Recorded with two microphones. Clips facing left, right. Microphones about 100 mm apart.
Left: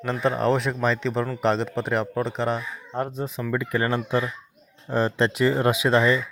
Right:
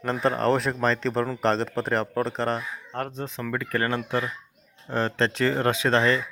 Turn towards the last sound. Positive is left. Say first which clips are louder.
# left 2 dB
turn(degrees=15)  # may be behind; listen again after turning